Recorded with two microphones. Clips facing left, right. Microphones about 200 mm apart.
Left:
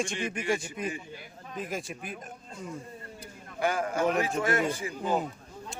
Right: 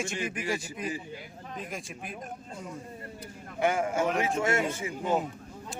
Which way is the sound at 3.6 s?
25° right (ahead or behind).